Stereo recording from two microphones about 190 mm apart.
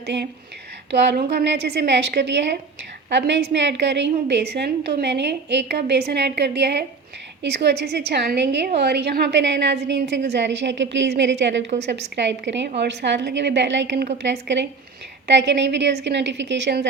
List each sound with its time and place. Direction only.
0.0 s a woman's voice: 65° right (ahead or behind)